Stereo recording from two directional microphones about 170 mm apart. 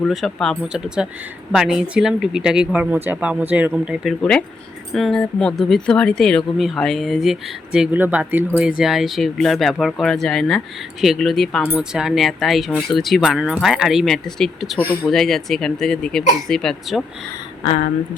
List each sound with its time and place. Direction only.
0.0 s speech: centre (ahead or behind)
4.2 s speech: 5° left (ahead or behind)